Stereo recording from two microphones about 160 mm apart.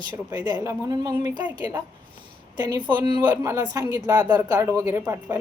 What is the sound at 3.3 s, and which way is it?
Speech, 20° right (ahead or behind).